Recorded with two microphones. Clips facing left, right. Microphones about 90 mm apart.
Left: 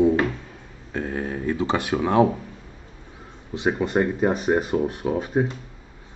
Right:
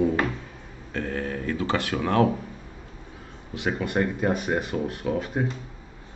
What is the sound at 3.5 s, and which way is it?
Speech, 20° left (ahead or behind).